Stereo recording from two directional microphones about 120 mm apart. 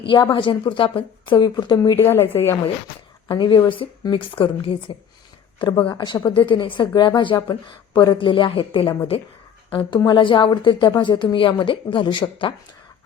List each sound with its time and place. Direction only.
0.1 s a woman's voice: 40° left (ahead or behind)
2.0 s a woman's voice: 20° left (ahead or behind)
2.8 s a woman's voice: 40° left (ahead or behind)